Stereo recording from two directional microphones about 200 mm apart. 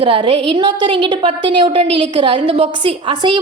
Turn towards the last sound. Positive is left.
turn(degrees=-25)  # may be behind; listen again after turning